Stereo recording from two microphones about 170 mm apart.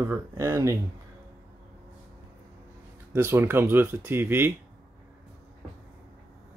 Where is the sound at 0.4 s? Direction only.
15° right (ahead or behind).